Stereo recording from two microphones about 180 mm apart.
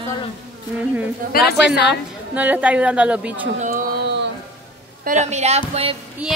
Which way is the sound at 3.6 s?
45° right (ahead or behind).